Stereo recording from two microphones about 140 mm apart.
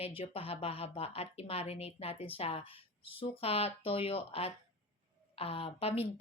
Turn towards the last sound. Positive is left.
turn(degrees=45)  # may be behind; listen again after turning